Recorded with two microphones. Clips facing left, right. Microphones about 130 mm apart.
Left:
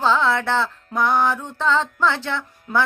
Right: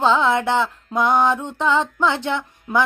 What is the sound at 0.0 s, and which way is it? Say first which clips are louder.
Music: right 2 dB; 15° right (ahead or behind).